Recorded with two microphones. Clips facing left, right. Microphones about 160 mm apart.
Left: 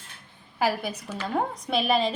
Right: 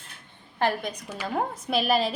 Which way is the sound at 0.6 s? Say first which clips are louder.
Even; 5° left (ahead or behind).